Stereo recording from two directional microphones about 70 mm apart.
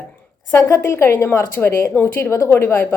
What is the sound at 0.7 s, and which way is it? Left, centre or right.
A woman's voice, left.